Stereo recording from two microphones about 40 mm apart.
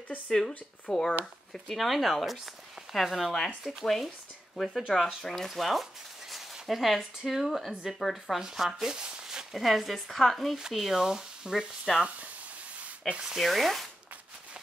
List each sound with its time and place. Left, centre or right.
0.3 s speech: centre
8.9 s a sound: right
9.6 s speech: centre
13.0 s speech: centre
13.4 s speech: centre